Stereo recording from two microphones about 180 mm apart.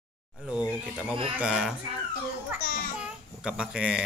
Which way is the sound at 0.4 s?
5° right (ahead or behind).